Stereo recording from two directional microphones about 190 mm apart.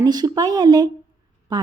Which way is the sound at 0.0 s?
20° right (ahead or behind).